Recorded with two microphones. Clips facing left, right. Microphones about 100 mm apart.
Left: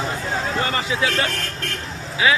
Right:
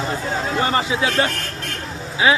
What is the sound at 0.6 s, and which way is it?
Speech, 30° right (ahead or behind).